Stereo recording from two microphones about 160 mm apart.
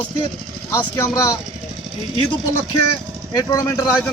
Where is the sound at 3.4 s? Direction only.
20° left (ahead or behind).